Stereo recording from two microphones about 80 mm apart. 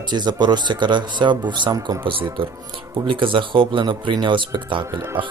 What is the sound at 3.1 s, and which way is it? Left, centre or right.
Speech, right.